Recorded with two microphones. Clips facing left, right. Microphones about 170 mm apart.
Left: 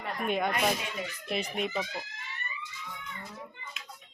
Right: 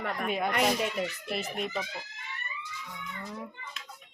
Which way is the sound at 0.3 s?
5° right (ahead or behind).